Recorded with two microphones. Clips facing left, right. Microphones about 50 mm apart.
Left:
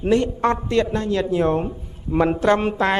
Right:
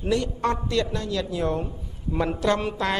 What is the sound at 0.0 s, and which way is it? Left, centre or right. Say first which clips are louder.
A woman's voice: left 6 dB; left.